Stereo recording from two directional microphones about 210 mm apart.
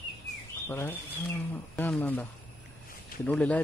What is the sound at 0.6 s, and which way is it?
Speech, 10° left (ahead or behind).